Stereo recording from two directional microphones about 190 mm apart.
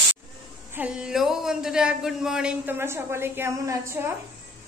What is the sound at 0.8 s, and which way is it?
A man's voice, 5° right (ahead or behind).